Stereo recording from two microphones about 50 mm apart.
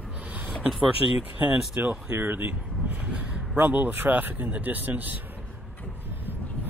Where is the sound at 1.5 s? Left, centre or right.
Right.